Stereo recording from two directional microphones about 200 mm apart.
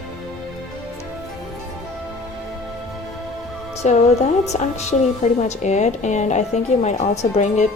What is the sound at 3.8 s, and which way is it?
A woman's voice, 35° left (ahead or behind).